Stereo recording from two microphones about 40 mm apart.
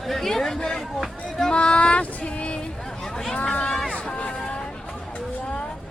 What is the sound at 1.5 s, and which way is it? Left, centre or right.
Female singing, left.